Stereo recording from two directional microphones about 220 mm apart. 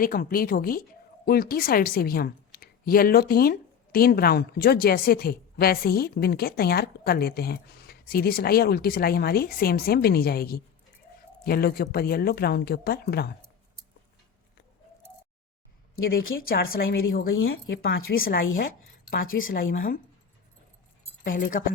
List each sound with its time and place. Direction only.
0.0 s a woman's voice: 40° left (ahead or behind)
16.0 s a woman's voice: 40° left (ahead or behind)
17.3 s speech: 65° left (ahead or behind)
17.8 s a woman's voice: 40° left (ahead or behind)
21.2 s a woman's voice: 40° left (ahead or behind)